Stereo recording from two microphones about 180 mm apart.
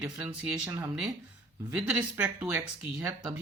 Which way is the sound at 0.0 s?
5° right (ahead or behind).